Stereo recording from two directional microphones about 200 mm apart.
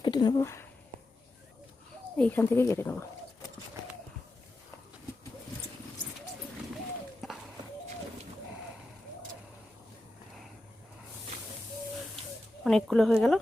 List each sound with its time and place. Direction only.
0.0 s a sound: 20° left (ahead or behind)
2.1 s speech: 5° left (ahead or behind)
12.6 s speech: centre (ahead or behind)